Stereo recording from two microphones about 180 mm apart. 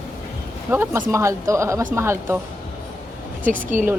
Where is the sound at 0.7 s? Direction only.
10° right (ahead or behind).